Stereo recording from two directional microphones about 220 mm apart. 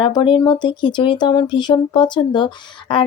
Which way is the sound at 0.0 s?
20° left (ahead or behind).